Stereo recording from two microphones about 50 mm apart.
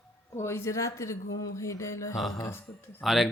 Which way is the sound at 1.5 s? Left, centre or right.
Left.